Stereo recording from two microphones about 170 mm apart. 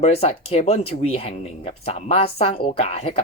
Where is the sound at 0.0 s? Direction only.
35° left (ahead or behind).